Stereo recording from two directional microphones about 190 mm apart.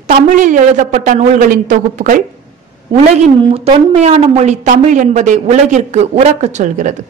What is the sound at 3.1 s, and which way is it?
A woman's voice, 35° right (ahead or behind).